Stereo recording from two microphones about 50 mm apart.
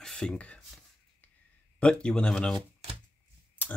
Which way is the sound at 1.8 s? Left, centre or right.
Left.